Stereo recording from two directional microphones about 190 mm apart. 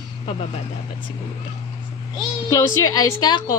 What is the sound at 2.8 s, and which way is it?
Speech, 20° left (ahead or behind).